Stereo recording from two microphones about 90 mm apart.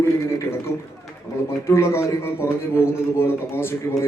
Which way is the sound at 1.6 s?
30° left (ahead or behind).